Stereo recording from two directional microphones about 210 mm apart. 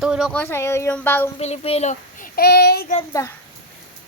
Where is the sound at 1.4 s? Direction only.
30° left (ahead or behind).